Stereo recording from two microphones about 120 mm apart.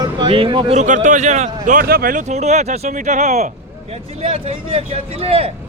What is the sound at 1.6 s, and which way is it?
Speech, 90° right.